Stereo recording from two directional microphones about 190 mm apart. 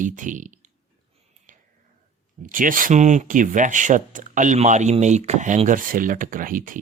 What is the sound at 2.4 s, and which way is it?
Speech, 45° right (ahead or behind).